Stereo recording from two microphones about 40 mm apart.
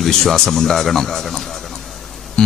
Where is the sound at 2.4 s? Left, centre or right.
Left.